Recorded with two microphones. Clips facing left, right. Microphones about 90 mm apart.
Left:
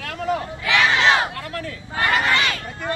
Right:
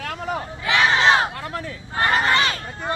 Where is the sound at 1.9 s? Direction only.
30° right (ahead or behind).